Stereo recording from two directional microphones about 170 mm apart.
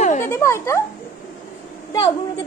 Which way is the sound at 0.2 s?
15° left (ahead or behind).